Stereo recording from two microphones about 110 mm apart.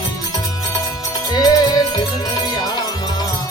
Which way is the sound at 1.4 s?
35° left (ahead or behind).